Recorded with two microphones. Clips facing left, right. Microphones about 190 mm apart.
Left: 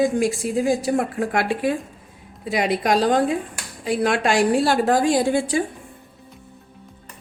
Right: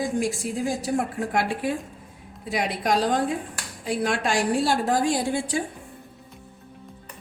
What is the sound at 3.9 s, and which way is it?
A woman's voice, 75° left (ahead or behind).